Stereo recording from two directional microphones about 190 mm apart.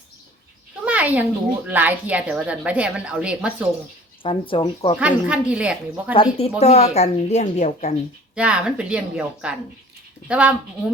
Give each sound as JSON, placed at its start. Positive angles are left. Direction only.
{"t": 0.9, "sound": "a woman's voice", "side_deg": -10}
{"t": 4.2, "sound": "speech", "side_deg": 25}
{"t": 4.9, "sound": "a woman's voice", "side_deg": -5}
{"t": 6.6, "sound": "a woman's voice", "side_deg": 35}
{"t": 8.4, "sound": "speech", "side_deg": -5}